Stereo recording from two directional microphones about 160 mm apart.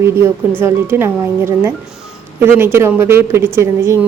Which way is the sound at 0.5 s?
15° right (ahead or behind).